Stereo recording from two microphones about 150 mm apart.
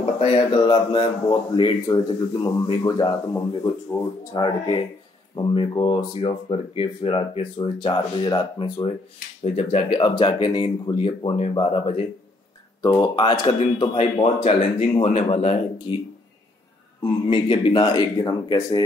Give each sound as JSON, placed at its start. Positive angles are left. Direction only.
{"t": 0.5, "sound": "speech", "side_deg": 30}
{"t": 9.4, "sound": "speech", "side_deg": 45}
{"t": 9.9, "sound": "speech", "side_deg": 35}
{"t": 12.8, "sound": "speech", "side_deg": 25}
{"t": 13.9, "sound": "speech", "side_deg": 40}
{"t": 15.9, "sound": "speech", "side_deg": 35}